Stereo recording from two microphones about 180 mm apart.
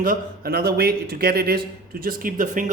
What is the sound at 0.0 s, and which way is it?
A man's voice, 55° right (ahead or behind).